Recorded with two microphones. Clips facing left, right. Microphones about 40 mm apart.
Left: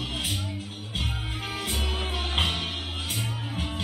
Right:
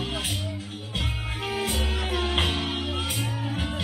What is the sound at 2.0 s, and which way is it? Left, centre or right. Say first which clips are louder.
Music: right 3 dB; right.